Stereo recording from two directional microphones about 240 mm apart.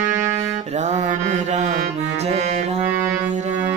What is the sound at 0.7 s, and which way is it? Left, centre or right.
Music, right.